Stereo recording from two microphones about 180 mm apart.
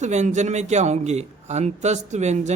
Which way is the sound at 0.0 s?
40° right (ahead or behind).